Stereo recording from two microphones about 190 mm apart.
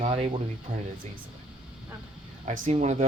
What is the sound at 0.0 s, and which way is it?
Speech, 30° right (ahead or behind).